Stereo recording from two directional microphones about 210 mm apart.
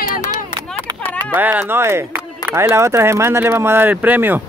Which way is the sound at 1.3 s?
10° right (ahead or behind).